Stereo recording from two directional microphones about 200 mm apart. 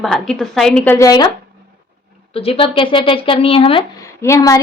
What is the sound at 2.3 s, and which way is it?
A woman's voice, 30° left (ahead or behind).